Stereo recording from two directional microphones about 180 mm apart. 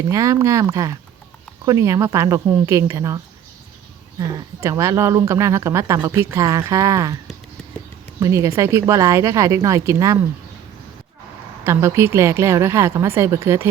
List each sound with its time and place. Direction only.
0.1 s speech: 15° right (ahead or behind)
4.4 s speech: 15° right (ahead or behind)
8.2 s speech: 15° right (ahead or behind)
11.6 s speech: 15° right (ahead or behind)